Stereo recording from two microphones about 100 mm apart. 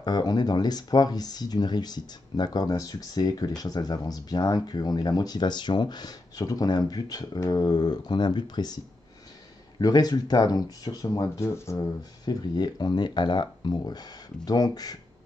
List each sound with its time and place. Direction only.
0.0 s speech: 45° left (ahead or behind)
9.8 s speech: 40° left (ahead or behind)
12.3 s speech: 45° left (ahead or behind)